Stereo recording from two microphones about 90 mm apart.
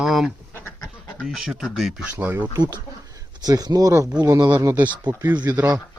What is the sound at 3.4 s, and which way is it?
Speech, 45° right (ahead or behind).